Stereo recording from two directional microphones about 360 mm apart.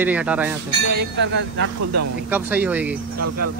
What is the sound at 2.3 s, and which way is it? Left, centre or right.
Speech, centre.